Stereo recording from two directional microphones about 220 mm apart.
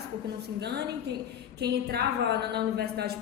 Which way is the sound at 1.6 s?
50° right (ahead or behind).